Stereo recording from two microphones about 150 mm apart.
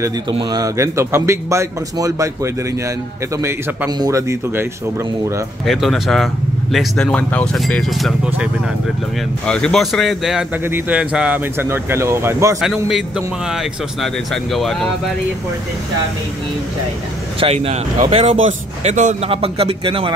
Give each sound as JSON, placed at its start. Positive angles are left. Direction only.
{"t": 0.4, "sound": "speech", "side_deg": -25}
{"t": 5.7, "sound": "speech", "side_deg": 0}
{"t": 9.5, "sound": "speech", "side_deg": 5}
{"t": 10.6, "sound": "speech", "side_deg": -10}
{"t": 12.5, "sound": "speech", "side_deg": 0}
{"t": 17.4, "sound": "speech", "side_deg": -40}
{"t": 18.1, "sound": "a man's voice", "side_deg": -50}
{"t": 19.3, "sound": "speech", "side_deg": -40}